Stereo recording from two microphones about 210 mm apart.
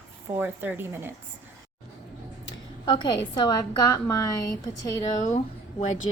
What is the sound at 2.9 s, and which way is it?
A woman's voice, 20° left (ahead or behind).